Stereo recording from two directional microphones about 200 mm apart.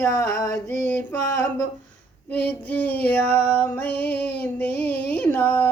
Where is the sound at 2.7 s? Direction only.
10° left (ahead or behind).